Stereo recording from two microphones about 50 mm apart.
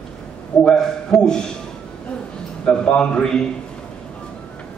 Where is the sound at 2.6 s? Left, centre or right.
Left.